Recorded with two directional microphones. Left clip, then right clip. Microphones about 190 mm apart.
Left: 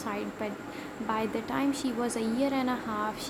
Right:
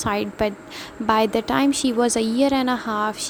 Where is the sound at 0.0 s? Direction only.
50° right (ahead or behind).